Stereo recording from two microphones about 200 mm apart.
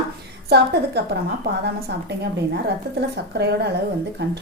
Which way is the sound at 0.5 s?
55° right (ahead or behind).